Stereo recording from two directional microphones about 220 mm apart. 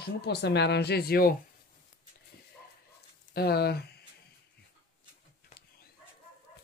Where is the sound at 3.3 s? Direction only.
45° left (ahead or behind).